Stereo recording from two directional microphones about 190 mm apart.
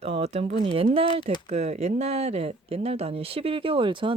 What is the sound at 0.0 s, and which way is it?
Speech, 30° right (ahead or behind).